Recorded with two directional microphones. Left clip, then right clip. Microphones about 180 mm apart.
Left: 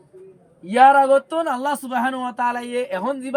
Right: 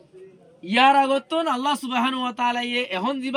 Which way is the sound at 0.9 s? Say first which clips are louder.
Left 4 dB; 30° left (ahead or behind).